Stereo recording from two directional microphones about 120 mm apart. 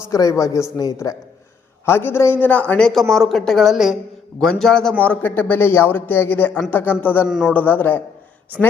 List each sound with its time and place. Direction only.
0.1 s speech: 30° left (ahead or behind)
1.8 s a man's voice: 20° left (ahead or behind)
7.3 s a man's voice: 5° right (ahead or behind)
7.5 s a man's voice: 15° left (ahead or behind)